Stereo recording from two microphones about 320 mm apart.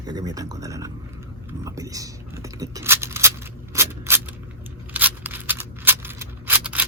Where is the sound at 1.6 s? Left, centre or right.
Centre.